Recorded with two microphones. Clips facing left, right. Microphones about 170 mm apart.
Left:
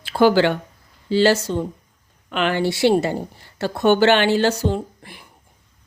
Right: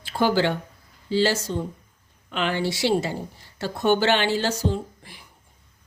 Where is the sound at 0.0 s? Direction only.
80° left; by 3.2 s 60° left (ahead or behind).